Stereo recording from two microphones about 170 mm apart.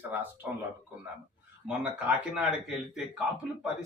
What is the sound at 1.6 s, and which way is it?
Speech, 5° right (ahead or behind).